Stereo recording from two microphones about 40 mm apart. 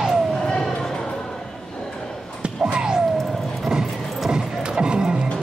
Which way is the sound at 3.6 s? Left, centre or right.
Centre.